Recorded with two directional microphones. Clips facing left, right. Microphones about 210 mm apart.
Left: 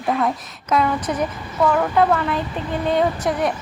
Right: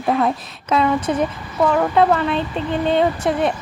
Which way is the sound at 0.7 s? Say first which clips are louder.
Right 2 dB; 25° right (ahead or behind).